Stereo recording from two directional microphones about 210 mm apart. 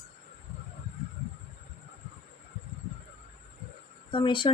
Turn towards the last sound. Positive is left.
turn(degrees=25)  # may be behind; listen again after turning